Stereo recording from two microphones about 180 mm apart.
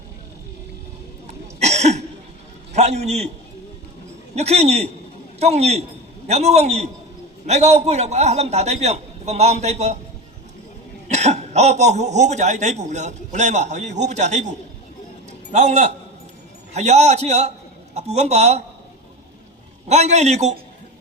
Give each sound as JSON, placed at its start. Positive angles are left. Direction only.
{"t": 1.3, "sound": "cough", "side_deg": -40}
{"t": 2.7, "sound": "a man's voice", "side_deg": -35}
{"t": 4.4, "sound": "speech", "side_deg": -35}
{"t": 11.1, "sound": "speech", "side_deg": -40}
{"t": 15.3, "sound": "music", "side_deg": -40}
{"t": 16.7, "sound": "speech", "side_deg": -35}
{"t": 19.9, "sound": "speech", "side_deg": -40}